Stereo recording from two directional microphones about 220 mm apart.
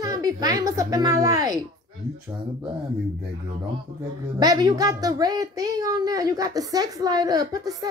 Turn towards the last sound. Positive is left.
turn(degrees=-15)  # may be behind; listen again after turning